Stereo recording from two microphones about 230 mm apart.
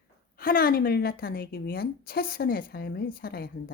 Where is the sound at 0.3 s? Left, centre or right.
Left.